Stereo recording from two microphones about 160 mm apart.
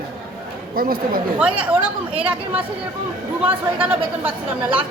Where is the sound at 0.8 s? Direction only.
65° right (ahead or behind).